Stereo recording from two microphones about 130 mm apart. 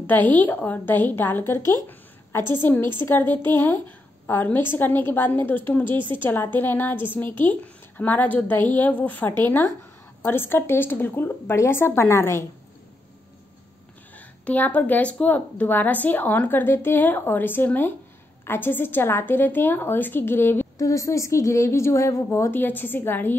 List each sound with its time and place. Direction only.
0.0 s a woman's voice: 15° left (ahead or behind)
14.1 s a woman's voice: 10° left (ahead or behind)